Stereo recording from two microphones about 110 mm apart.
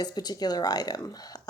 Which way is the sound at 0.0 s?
40° left (ahead or behind).